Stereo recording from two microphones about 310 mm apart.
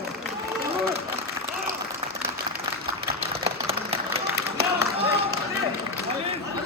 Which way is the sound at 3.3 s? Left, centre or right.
Centre.